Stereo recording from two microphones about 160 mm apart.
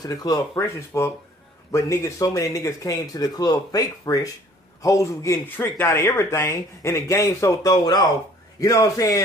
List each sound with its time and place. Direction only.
0.0 s speech: 25° left (ahead or behind)